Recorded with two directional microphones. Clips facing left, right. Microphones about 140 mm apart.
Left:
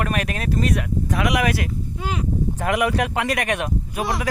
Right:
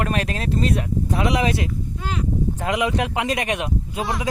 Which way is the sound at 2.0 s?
10° left (ahead or behind).